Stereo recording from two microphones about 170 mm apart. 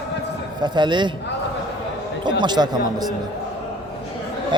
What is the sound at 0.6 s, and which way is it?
Speech, 25° right (ahead or behind).